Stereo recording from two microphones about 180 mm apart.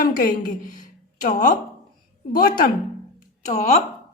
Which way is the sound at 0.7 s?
45° left (ahead or behind).